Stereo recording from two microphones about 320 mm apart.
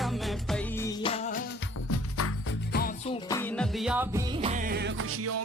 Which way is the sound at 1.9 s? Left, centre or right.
Left.